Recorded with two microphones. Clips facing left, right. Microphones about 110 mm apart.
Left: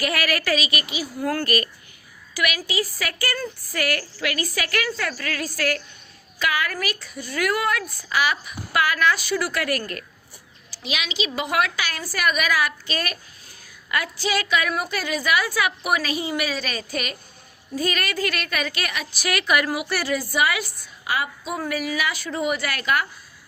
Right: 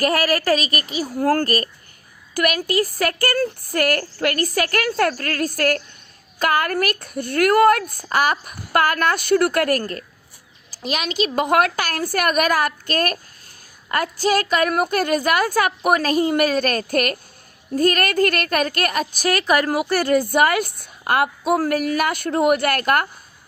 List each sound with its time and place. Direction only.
0.0 s a woman's voice: 40° right (ahead or behind)
2.3 s a woman's voice: 50° right (ahead or behind)